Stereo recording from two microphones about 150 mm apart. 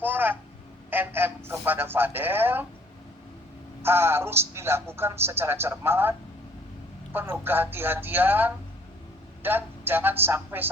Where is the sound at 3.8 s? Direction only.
15° right (ahead or behind).